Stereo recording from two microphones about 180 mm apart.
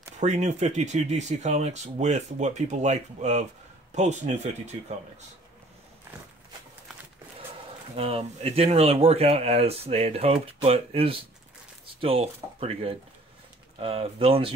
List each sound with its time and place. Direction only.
0.2 s speech: 40° right (ahead or behind)
7.9 s speech: 35° right (ahead or behind)